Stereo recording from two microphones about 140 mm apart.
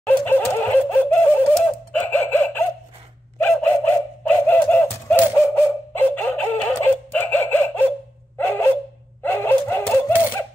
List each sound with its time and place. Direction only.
0.0 s laughter: 15° left (ahead or behind)
1.5 s a sound: 5° left (ahead or behind)
9.2 s dog: 15° left (ahead or behind)